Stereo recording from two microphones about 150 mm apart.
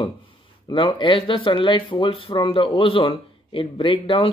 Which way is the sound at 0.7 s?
30° left (ahead or behind).